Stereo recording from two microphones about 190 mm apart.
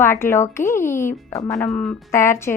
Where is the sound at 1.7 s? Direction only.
5° left (ahead or behind).